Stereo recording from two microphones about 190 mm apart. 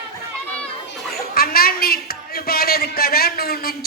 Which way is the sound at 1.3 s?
50° left (ahead or behind).